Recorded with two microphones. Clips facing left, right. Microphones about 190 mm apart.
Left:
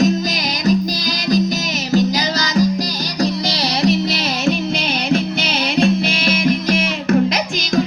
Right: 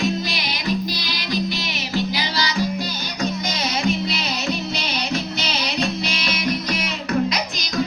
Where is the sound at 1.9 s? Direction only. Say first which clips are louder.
Left 8 dB; 45° left (ahead or behind).